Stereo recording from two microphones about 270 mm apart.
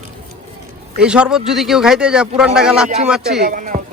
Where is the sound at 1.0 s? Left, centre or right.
Centre.